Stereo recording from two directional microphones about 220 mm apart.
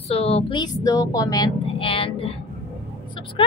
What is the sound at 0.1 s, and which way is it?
A woman's voice, 25° left (ahead or behind).